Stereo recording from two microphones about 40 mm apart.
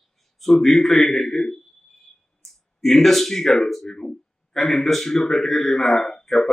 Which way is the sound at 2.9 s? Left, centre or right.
Centre.